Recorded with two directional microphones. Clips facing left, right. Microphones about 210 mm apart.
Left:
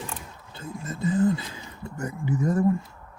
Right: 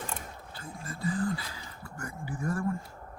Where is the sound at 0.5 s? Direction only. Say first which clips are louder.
Left 8 dB; 25° left (ahead or behind).